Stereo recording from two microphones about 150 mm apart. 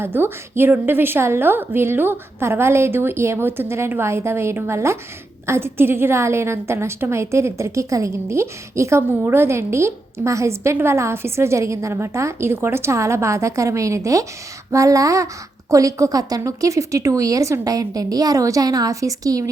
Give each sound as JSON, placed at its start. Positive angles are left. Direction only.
{"t": 0.0, "sound": "a woman's voice", "side_deg": -15}